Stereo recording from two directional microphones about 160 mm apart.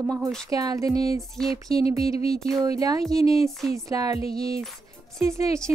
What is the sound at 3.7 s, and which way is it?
Speech, 20° right (ahead or behind).